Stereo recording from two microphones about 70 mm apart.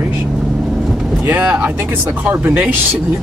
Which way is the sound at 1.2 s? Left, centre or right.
Right.